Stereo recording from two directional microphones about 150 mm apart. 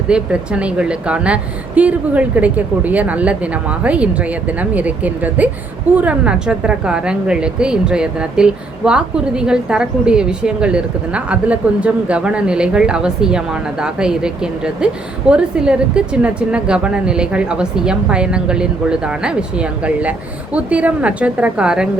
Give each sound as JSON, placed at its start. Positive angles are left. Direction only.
{"t": 0.1, "sound": "a woman's voice", "side_deg": -5}